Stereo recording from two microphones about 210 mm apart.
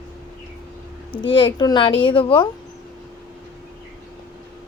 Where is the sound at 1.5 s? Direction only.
20° left (ahead or behind).